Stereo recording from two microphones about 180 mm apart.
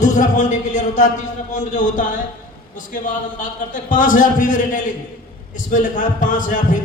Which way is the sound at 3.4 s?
45° left (ahead or behind).